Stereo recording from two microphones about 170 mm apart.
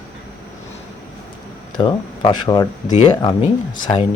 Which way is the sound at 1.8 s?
25° left (ahead or behind).